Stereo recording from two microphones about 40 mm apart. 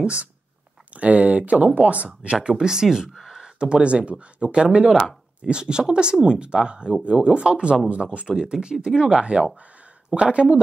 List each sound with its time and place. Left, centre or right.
0.0 s speech: right
2.4 s speech: centre